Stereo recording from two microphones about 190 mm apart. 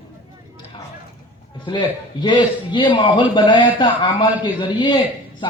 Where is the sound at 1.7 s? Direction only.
25° left (ahead or behind).